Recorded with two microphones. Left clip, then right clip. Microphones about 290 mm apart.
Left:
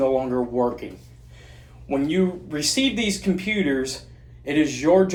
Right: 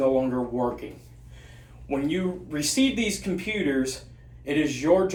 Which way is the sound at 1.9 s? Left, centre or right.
Left.